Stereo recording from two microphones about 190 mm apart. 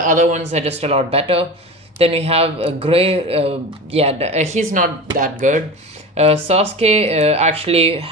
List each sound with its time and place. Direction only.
0.0 s speech: 40° right (ahead or behind)